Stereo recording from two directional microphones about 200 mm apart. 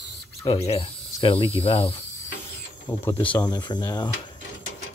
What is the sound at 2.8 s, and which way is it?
Speech, 10° left (ahead or behind).